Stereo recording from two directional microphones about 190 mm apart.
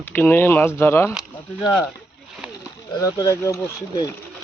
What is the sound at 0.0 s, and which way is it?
Speech, 10° left (ahead or behind).